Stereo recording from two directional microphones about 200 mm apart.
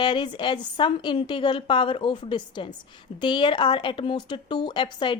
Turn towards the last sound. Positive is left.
turn(degrees=25)  # may be behind; listen again after turning